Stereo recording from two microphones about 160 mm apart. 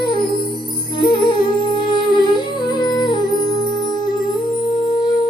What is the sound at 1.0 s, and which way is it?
Music, 30° left (ahead or behind).